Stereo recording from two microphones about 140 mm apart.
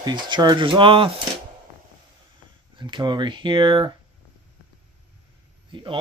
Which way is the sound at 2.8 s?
35° right (ahead or behind).